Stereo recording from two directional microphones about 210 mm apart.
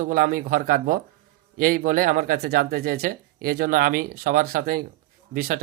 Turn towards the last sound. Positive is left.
turn(degrees=-45)  # may be behind; listen again after turning